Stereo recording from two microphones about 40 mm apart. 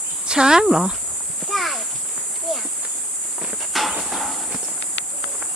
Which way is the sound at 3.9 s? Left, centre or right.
Centre.